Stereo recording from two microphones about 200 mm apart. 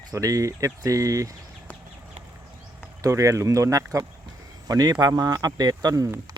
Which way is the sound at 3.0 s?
15° right (ahead or behind).